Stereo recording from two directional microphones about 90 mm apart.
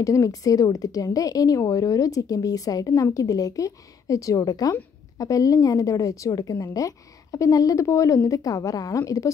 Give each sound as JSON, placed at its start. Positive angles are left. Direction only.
{"t": 0.0, "sound": "speech", "side_deg": 35}